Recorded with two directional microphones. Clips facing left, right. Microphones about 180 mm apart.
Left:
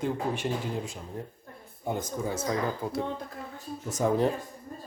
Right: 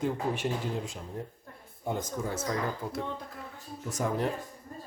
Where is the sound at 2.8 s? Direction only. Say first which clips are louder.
Left 4 dB; 25° left (ahead or behind).